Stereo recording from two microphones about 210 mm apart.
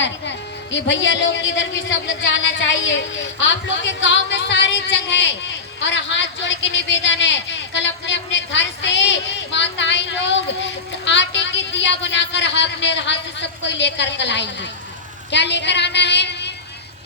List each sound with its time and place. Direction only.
0.0 s speech: 60° left (ahead or behind)